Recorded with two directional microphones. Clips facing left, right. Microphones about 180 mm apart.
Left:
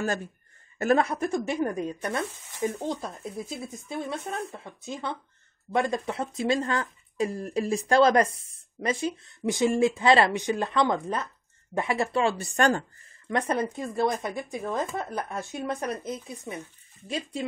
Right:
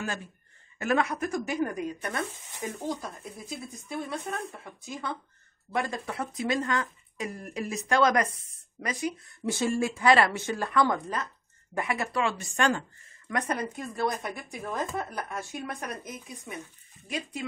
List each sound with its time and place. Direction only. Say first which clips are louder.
0.7 s speech: left 4 dB; 35° left (ahead or behind)
13.3 s speech: left 4 dB; 25° left (ahead or behind)